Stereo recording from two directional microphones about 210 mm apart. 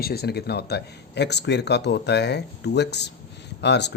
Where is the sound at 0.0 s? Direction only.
50° left (ahead or behind).